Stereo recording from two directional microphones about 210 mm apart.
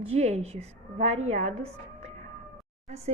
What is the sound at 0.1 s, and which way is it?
A woman's voice, 30° right (ahead or behind).